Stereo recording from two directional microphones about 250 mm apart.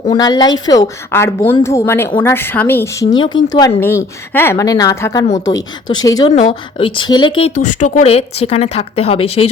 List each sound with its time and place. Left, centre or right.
0.1 s a woman's voice: centre
7.5 s speech: left
7.8 s speech: left